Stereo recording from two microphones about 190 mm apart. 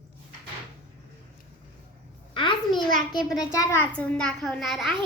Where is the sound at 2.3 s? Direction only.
25° left (ahead or behind).